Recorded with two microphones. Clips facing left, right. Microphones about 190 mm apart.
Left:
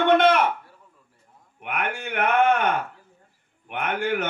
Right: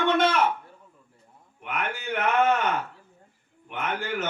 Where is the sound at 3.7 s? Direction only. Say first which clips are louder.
Left 5 dB; 60° left (ahead or behind).